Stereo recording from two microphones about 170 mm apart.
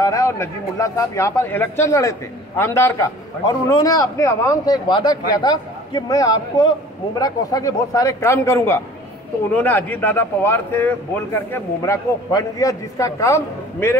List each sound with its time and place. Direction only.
0.0 s a man's voice: 20° left (ahead or behind)